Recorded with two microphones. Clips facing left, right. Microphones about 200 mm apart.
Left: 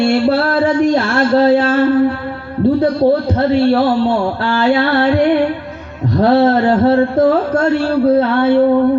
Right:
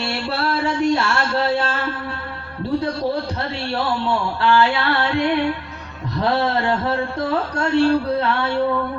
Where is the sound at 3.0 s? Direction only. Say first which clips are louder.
Left 10 dB; 55° left (ahead or behind).